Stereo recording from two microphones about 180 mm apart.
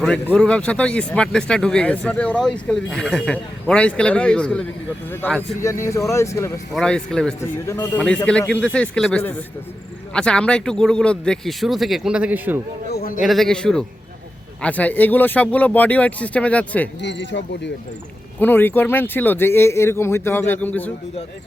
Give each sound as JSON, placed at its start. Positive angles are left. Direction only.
{"t": 0.0, "sound": "speech", "side_deg": 5}
{"t": 5.6, "sound": "speech", "side_deg": 15}
{"t": 6.7, "sound": "speech", "side_deg": 5}
{"t": 12.9, "sound": "a sound", "side_deg": 55}
{"t": 13.2, "sound": "speech", "side_deg": 0}
{"t": 17.0, "sound": "speech", "side_deg": 80}
{"t": 18.3, "sound": "speech", "side_deg": 10}